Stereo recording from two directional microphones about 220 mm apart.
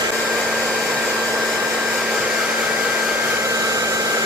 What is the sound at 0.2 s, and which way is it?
Vacuum cleaner, centre (ahead or behind).